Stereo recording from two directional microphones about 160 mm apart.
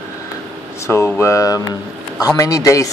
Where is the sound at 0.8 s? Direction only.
15° left (ahead or behind).